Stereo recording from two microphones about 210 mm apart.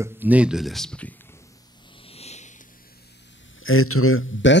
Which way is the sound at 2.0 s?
30° left (ahead or behind).